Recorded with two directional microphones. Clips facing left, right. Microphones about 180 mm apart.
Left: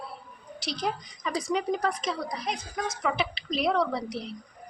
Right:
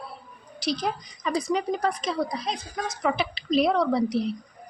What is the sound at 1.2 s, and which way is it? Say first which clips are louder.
A woman's voice: right 3 dB; 35° right (ahead or behind).